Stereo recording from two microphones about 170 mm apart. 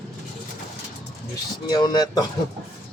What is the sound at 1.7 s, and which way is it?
Speech, 25° left (ahead or behind).